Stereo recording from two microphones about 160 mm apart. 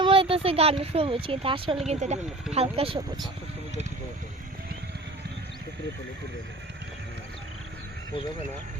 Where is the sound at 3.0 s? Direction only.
25° right (ahead or behind).